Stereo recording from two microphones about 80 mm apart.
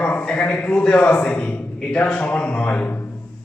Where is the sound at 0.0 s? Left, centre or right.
Centre.